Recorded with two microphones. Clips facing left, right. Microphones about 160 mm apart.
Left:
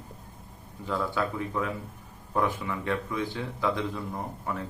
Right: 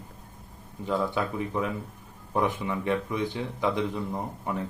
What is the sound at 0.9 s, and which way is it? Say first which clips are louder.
Speech: right 2 dB; 20° right (ahead or behind).